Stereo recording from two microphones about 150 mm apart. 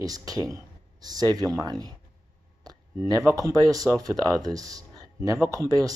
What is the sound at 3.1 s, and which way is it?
Speech, 20° right (ahead or behind).